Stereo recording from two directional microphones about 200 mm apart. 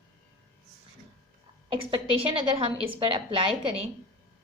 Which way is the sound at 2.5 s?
25° right (ahead or behind).